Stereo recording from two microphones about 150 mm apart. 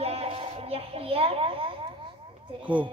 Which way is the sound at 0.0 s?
40° right (ahead or behind).